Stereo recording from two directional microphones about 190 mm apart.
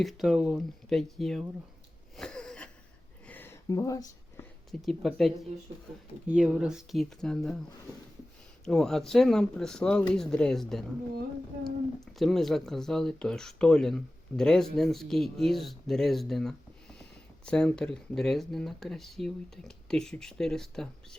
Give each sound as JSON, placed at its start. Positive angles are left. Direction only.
{"t": 0.0, "sound": "speech", "side_deg": 0}
{"t": 2.1, "sound": "wheeze", "side_deg": 5}
{"t": 3.2, "sound": "a sound", "side_deg": 10}
{"t": 4.7, "sound": "speech", "side_deg": 0}
{"t": 8.6, "sound": "speech", "side_deg": 0}
{"t": 11.9, "sound": "speech", "side_deg": 0}